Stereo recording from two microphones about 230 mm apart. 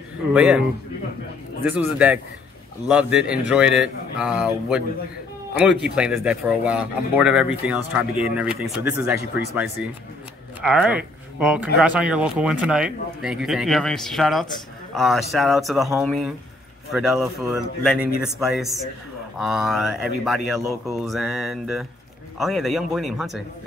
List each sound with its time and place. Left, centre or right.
0.3 s a man's voice: centre
5.5 s speech: centre
9.2 s speech: left
10.6 s speech: centre